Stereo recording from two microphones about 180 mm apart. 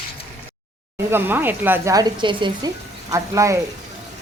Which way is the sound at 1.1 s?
10° right (ahead or behind).